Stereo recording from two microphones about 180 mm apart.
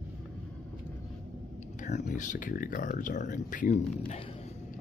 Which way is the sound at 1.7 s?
45° left (ahead or behind).